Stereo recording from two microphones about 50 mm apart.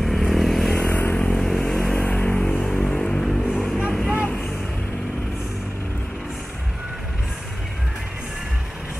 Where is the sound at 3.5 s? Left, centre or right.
Centre.